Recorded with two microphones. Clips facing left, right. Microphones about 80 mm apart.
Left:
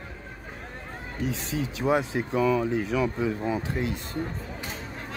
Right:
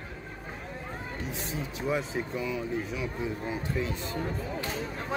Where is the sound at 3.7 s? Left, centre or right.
Left.